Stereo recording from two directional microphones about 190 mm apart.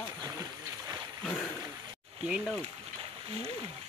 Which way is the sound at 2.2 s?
5° right (ahead or behind).